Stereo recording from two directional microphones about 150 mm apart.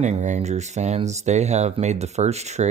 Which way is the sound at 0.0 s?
50° right (ahead or behind).